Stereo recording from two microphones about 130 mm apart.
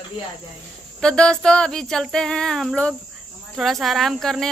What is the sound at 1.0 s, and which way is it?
Child singing, 5° left (ahead or behind).